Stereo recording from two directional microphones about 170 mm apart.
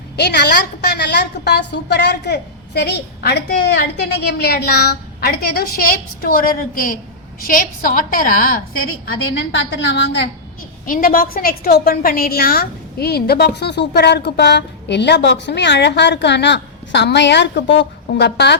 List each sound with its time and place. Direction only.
0.2 s a woman's voice: 75° left (ahead or behind); by 8.6 s 55° left (ahead or behind)
9.0 s a woman's voice: 90° left
10.8 s a woman's voice: 55° left (ahead or behind); by 18.5 s 80° left